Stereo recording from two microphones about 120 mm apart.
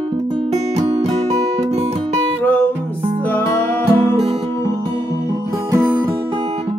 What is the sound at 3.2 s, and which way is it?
Music, 15° left (ahead or behind).